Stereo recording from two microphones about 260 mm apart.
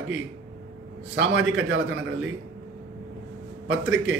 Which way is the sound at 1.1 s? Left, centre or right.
Right.